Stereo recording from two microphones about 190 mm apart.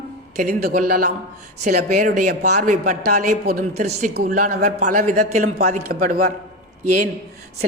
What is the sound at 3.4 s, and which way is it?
Speech, 55° right (ahead or behind).